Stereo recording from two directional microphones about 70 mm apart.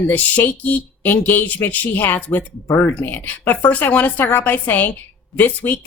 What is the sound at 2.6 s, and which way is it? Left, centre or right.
Speech, left.